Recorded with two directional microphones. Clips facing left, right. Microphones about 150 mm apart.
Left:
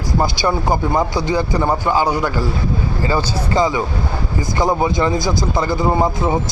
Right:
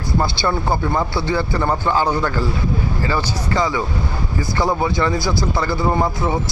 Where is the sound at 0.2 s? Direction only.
15° left (ahead or behind).